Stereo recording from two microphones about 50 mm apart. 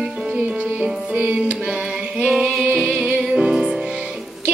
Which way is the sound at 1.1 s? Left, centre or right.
Right.